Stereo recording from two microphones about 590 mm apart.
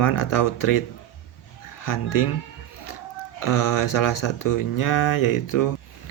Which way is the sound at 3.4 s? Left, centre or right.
Left.